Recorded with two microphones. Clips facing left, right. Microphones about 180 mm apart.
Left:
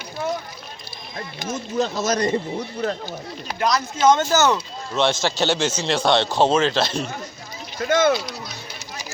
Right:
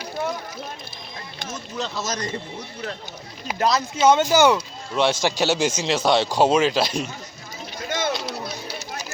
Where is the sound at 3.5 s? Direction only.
30° right (ahead or behind).